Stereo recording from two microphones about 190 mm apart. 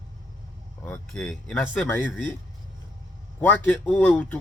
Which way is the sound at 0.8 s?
5° left (ahead or behind).